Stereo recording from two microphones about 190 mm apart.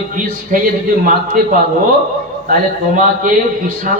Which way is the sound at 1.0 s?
45° right (ahead or behind).